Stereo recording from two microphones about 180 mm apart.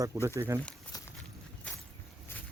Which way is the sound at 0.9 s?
20° left (ahead or behind).